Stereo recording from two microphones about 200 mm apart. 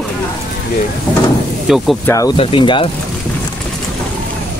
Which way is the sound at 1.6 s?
Centre (ahead or behind).